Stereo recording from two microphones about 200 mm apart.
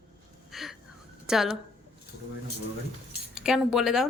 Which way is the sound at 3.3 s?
5° right (ahead or behind).